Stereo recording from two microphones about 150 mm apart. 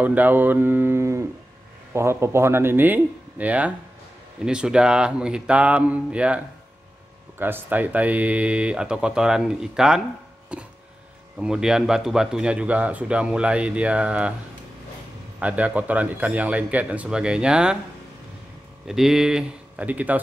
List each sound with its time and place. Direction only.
0.0 s speech: 10° right (ahead or behind)
10.5 s a sound: 5° right (ahead or behind)
11.3 s speech: 5° right (ahead or behind)
15.3 s speech: 10° right (ahead or behind)
18.9 s speech: centre (ahead or behind)